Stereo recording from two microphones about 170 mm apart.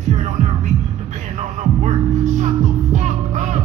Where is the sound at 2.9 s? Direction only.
45° right (ahead or behind).